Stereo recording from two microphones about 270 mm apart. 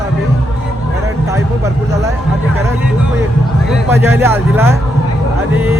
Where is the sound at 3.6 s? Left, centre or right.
Centre.